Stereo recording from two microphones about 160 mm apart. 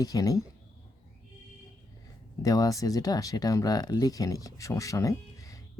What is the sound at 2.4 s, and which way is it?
Speech, 25° left (ahead or behind).